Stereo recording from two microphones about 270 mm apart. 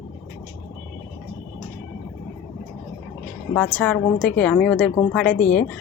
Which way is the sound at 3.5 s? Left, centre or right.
Centre.